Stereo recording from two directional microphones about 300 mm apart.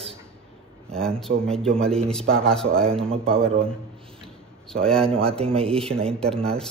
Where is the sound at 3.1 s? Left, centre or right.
Centre.